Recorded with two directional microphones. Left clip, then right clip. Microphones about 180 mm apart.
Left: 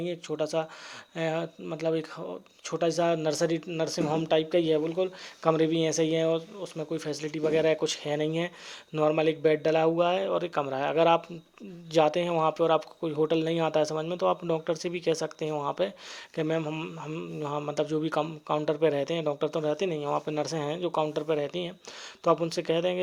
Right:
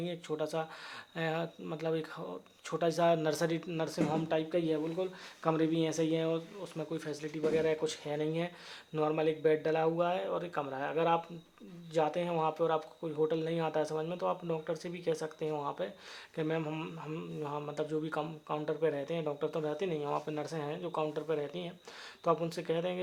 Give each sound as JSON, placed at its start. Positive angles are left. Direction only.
{"t": 0.0, "sound": "speech", "side_deg": 25}
{"t": 16.6, "sound": "speech", "side_deg": 20}
{"t": 17.4, "sound": "speech", "side_deg": 35}